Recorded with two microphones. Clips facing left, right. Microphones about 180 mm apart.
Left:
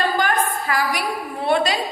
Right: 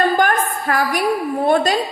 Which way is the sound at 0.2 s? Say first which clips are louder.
Right 3 dB; 50° right (ahead or behind).